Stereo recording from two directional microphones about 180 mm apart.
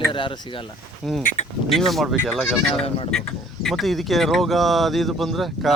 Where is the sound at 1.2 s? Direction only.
50° left (ahead or behind).